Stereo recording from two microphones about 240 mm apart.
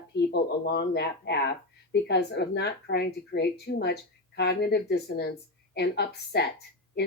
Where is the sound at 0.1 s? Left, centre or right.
Left.